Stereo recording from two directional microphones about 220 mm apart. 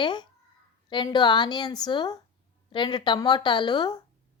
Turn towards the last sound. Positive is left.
turn(degrees=20)  # may be behind; listen again after turning